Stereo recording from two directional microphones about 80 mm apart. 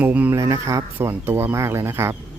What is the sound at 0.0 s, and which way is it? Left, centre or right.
Speech, right.